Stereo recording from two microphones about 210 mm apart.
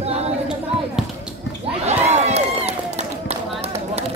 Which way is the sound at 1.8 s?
30° right (ahead or behind).